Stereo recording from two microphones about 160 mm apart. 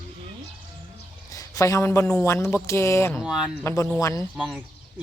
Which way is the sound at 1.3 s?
20° left (ahead or behind).